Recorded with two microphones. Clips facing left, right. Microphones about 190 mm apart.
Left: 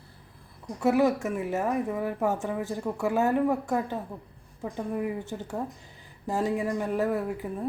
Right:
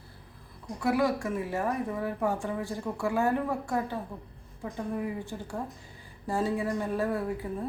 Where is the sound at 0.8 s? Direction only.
20° left (ahead or behind).